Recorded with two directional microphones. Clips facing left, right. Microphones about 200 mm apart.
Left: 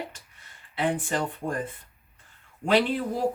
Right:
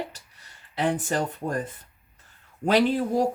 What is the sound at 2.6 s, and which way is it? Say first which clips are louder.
Speech: right 2 dB; 40° right (ahead or behind).